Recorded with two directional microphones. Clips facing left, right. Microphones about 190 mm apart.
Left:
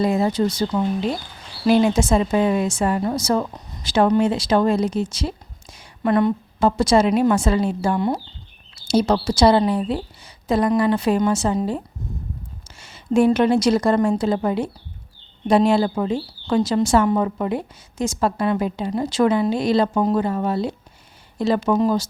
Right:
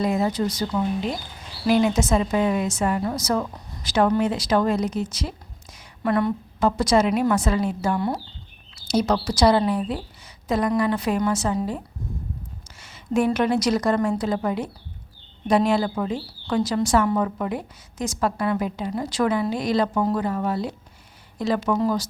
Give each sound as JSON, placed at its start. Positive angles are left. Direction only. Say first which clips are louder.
{"t": 0.0, "sound": "a woman's voice", "louder": "left 3 dB", "side_deg": 30}
{"t": 12.8, "sound": "a woman's voice", "louder": "left 5 dB", "side_deg": 30}